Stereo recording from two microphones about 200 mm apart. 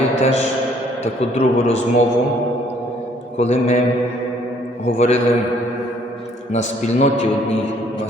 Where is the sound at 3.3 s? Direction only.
30° left (ahead or behind).